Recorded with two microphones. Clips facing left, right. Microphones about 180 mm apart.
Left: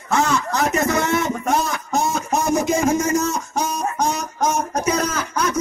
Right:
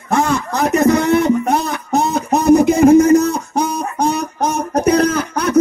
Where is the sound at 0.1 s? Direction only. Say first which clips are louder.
Right 3 dB; 55° right (ahead or behind).